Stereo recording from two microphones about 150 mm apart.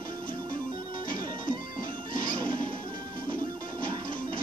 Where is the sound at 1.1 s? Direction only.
65° left (ahead or behind).